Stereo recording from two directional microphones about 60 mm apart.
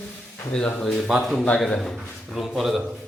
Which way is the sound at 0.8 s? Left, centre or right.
Centre.